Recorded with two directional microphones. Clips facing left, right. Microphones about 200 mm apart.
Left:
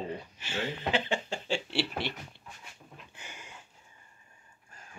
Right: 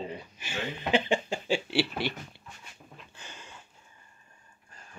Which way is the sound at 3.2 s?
15° left (ahead or behind).